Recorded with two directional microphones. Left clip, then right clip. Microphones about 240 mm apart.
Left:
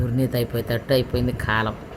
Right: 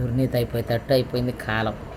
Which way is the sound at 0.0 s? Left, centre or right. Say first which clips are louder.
Even; centre.